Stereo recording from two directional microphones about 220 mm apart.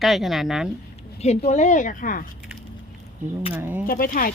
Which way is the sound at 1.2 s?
30° left (ahead or behind).